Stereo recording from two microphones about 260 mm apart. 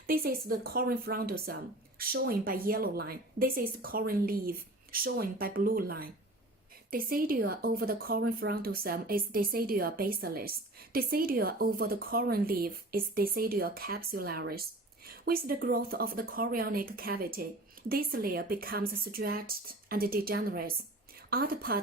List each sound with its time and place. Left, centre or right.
0.1 s speech: right